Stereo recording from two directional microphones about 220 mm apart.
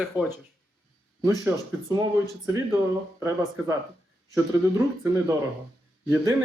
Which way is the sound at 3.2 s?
15° right (ahead or behind).